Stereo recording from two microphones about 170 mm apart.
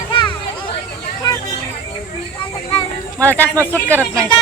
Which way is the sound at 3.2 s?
10° left (ahead or behind).